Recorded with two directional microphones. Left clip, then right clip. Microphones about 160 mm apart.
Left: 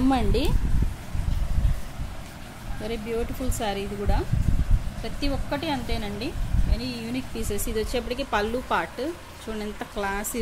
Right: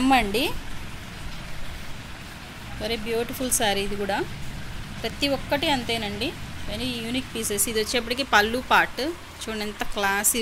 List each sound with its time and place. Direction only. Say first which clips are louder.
0.1 s speech: right 4 dB; 5° left (ahead or behind)
2.8 s speech: right 3 dB; 5° left (ahead or behind)